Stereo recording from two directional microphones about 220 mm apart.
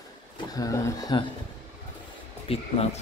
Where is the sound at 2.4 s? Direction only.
25° left (ahead or behind).